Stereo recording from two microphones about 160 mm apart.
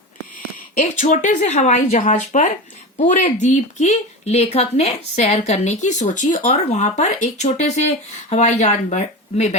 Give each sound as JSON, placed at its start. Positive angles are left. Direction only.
{"t": 0.8, "sound": "speech", "side_deg": 50}